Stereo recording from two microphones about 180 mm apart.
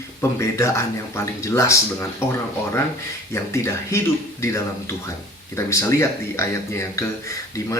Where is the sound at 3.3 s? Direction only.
15° left (ahead or behind).